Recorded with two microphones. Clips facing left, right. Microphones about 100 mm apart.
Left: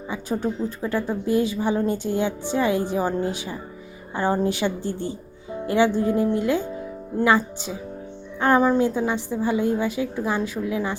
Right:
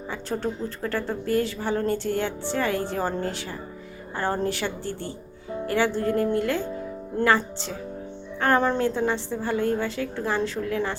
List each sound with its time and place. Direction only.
0.1 s a woman's voice: 15° left (ahead or behind)